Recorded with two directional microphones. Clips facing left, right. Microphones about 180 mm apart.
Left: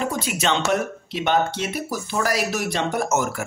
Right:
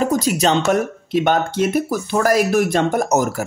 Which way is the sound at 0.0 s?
40° right (ahead or behind).